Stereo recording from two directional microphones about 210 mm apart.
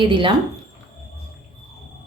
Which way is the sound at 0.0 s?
25° right (ahead or behind).